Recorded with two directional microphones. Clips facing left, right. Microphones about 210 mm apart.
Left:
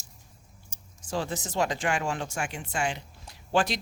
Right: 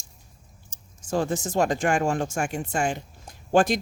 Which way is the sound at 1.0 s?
50° right (ahead or behind).